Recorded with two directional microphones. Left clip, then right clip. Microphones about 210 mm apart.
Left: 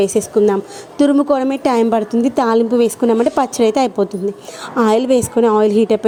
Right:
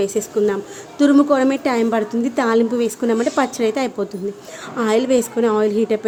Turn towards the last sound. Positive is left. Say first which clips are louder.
# left 5 dB
turn(degrees=25)  # may be behind; listen again after turning